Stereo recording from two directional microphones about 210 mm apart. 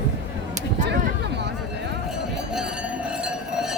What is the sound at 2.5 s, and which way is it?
Chink, 5° right (ahead or behind).